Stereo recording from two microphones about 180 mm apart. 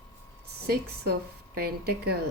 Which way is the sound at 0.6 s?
60° right (ahead or behind).